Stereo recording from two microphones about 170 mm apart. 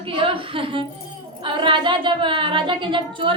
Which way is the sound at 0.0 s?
30° right (ahead or behind).